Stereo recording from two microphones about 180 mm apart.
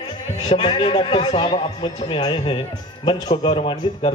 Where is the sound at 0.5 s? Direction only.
30° left (ahead or behind).